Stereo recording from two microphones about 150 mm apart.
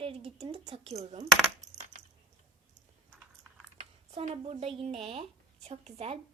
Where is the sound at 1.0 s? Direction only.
50° right (ahead or behind).